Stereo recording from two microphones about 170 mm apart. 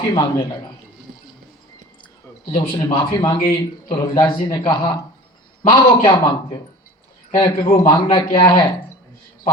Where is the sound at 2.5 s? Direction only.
30° left (ahead or behind).